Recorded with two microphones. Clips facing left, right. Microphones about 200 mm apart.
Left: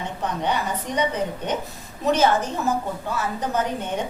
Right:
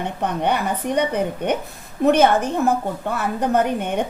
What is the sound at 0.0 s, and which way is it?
A woman's voice, 60° right (ahead or behind).